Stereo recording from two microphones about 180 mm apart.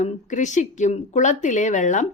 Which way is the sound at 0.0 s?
40° left (ahead or behind).